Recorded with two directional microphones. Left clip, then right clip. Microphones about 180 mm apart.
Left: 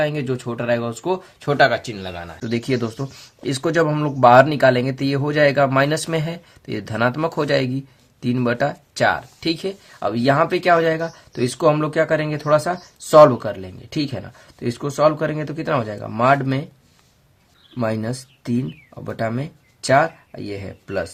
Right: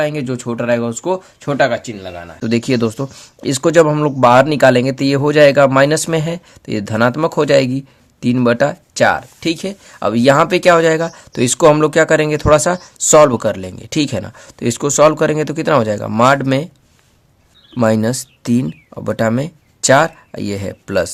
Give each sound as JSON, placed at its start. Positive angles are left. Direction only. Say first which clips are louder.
{"t": 0.0, "sound": "speech", "louder": "right 3 dB", "side_deg": -25}
{"t": 1.5, "sound": "speech", "louder": "right 1 dB", "side_deg": -15}
{"t": 2.4, "sound": "speech", "louder": "right 7 dB", "side_deg": -35}
{"t": 17.7, "sound": "speech", "louder": "right 9 dB", "side_deg": -45}